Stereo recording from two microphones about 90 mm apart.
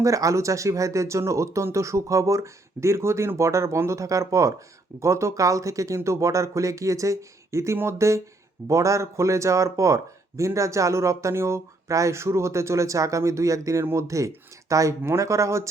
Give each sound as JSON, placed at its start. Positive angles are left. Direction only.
{"t": 0.0, "sound": "speech", "side_deg": -40}